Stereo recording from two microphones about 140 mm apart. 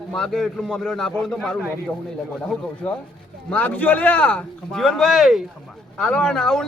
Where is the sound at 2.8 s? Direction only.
10° left (ahead or behind).